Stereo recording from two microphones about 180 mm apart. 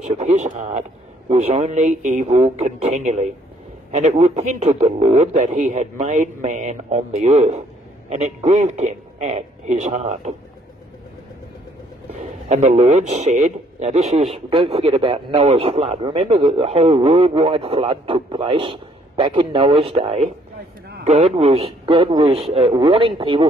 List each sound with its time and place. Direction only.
0.2 s a man's voice: 40° right (ahead or behind)
12.2 s a man's voice: 40° right (ahead or behind)